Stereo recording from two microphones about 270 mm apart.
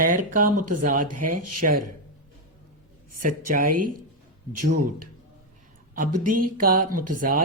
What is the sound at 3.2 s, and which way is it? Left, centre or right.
Speech, right.